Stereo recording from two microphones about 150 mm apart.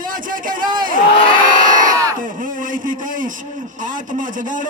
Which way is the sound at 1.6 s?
60° right (ahead or behind).